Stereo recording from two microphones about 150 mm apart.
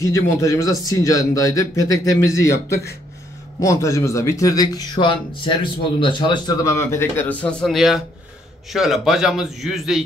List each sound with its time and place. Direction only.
0.0 s a man's voice: 20° left (ahead or behind); by 10.0 s centre (ahead or behind)